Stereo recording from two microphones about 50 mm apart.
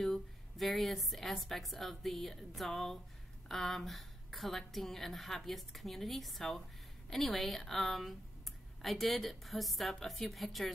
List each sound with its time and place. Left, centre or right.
0.0 s a woman's voice: centre